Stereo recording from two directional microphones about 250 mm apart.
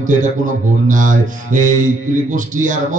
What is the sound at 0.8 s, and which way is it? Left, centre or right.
A man's voice, right.